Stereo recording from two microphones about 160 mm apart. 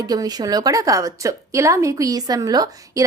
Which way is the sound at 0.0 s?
25° right (ahead or behind).